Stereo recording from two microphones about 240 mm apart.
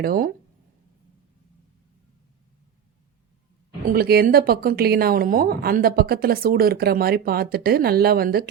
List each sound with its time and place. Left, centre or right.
0.0 s a woman's voice: right
3.8 s a woman's voice: right